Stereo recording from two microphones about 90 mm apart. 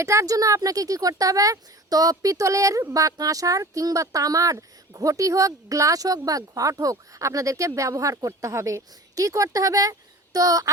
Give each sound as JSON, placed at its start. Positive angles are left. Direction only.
{"t": 0.0, "sound": "speech", "side_deg": -35}